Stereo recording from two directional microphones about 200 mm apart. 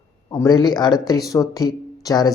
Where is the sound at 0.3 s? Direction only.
20° left (ahead or behind).